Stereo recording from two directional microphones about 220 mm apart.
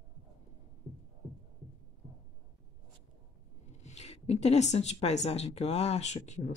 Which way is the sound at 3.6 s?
30° left (ahead or behind).